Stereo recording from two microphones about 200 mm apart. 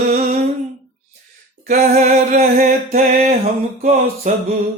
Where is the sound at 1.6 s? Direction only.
40° right (ahead or behind).